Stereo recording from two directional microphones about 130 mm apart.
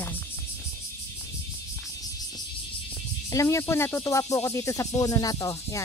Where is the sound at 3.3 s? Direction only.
20° left (ahead or behind).